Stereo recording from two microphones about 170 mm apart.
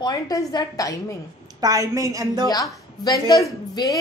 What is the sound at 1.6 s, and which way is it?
Speech, 20° right (ahead or behind).